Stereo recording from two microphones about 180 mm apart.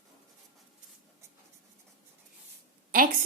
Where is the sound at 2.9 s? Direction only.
50° right (ahead or behind).